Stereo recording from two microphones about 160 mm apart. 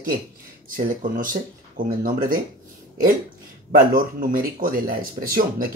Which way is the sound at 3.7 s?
60° right (ahead or behind).